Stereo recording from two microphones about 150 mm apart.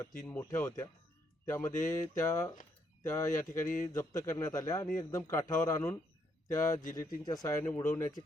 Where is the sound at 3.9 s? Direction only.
20° left (ahead or behind).